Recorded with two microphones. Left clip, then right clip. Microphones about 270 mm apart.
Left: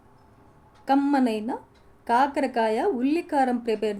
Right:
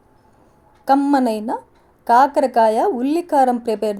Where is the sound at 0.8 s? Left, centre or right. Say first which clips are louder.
Right 7 dB; right.